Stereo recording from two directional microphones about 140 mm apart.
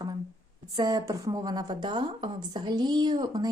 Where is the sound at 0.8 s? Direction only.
30° right (ahead or behind).